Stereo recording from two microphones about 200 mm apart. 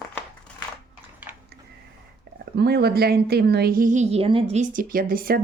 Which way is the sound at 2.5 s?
55° right (ahead or behind).